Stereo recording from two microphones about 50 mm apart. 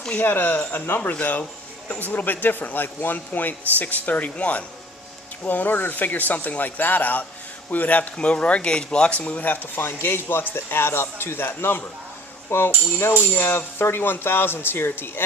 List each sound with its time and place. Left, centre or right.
0.2 s speech: left
1.2 s speech: left
13.3 s speech: left